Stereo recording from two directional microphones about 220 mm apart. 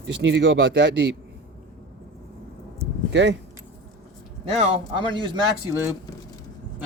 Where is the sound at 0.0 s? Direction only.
55° right (ahead or behind).